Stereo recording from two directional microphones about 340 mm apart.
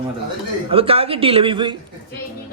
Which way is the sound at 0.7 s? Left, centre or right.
Centre.